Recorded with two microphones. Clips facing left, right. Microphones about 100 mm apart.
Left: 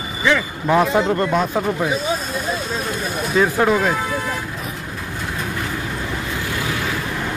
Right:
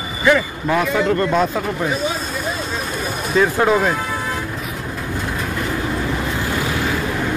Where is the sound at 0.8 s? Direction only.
25° left (ahead or behind).